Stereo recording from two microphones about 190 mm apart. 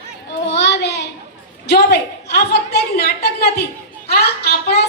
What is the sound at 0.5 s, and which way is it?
Child singing, 60° left (ahead or behind).